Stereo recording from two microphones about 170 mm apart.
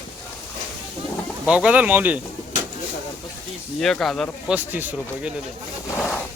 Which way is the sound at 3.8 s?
Centre (ahead or behind).